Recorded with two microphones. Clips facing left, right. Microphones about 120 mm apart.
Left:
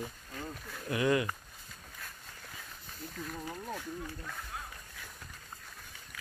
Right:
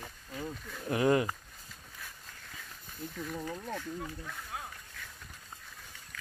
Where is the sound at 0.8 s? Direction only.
35° right (ahead or behind).